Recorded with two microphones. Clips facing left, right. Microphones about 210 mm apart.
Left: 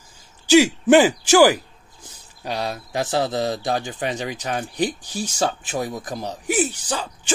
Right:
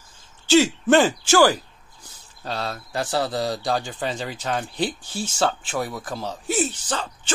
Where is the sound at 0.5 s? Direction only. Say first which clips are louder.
Left 3 dB; 15° left (ahead or behind).